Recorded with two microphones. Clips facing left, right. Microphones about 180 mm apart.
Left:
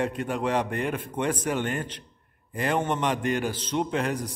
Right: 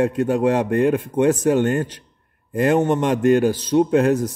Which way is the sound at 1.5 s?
45° right (ahead or behind).